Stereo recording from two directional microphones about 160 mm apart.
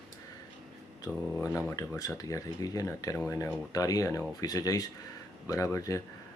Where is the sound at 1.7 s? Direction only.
20° left (ahead or behind).